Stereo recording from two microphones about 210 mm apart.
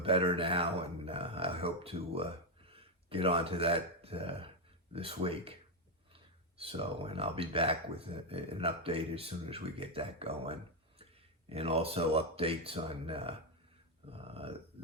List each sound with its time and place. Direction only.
0.0 s speech: 25° right (ahead or behind)